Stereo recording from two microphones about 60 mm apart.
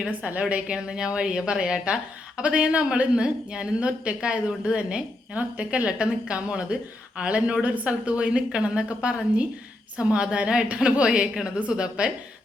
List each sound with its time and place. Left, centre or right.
0.1 s a woman's voice: right